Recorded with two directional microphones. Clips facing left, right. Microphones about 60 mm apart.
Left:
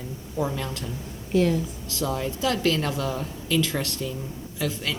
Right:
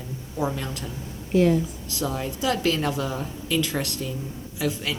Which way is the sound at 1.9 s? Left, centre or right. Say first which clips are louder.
Left 1 dB; centre.